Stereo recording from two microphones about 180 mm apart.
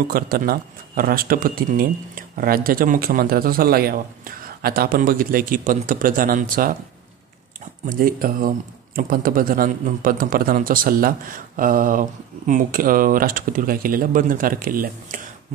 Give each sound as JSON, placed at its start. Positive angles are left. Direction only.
{"t": 0.1, "sound": "speech", "side_deg": -55}
{"t": 7.8, "sound": "speech", "side_deg": -50}